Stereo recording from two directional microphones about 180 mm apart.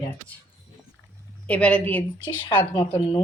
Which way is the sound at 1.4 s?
5° left (ahead or behind).